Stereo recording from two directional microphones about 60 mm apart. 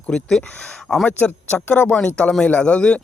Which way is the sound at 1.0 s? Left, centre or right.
Left.